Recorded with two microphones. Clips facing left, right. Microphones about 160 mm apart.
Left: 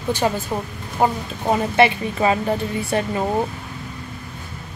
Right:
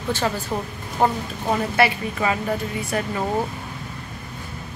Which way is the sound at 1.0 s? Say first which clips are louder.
Left 1 dB; 10° left (ahead or behind).